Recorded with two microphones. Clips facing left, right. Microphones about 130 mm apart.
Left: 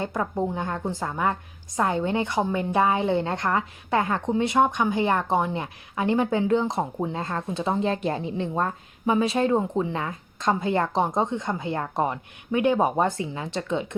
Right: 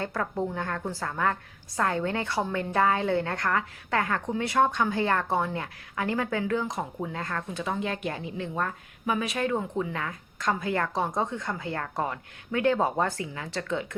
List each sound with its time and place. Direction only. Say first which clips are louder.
0.0 s a woman's voice: left 3 dB; 20° left (ahead or behind)